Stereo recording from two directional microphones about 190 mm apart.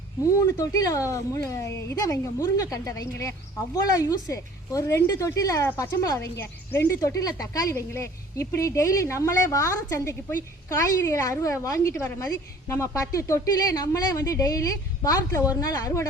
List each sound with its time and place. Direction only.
0.4 s a woman's voice: 15° left (ahead or behind)